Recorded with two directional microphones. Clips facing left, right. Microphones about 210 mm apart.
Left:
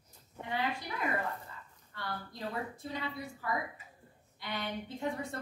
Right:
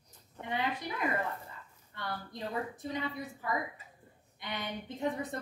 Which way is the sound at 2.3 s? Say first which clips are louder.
Right 3 dB; 20° right (ahead or behind).